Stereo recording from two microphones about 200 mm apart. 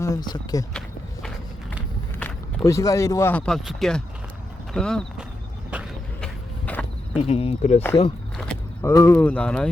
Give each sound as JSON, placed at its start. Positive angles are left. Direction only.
{"t": 0.0, "sound": "speech", "side_deg": 20}
{"t": 0.7, "sound": "walk", "side_deg": 5}
{"t": 2.1, "sound": "speech", "side_deg": 10}
{"t": 5.7, "sound": "a sound", "side_deg": -5}
{"t": 6.2, "sound": "a sound", "side_deg": 5}
{"t": 7.2, "sound": "speech", "side_deg": 30}
{"t": 8.8, "sound": "speech", "side_deg": 15}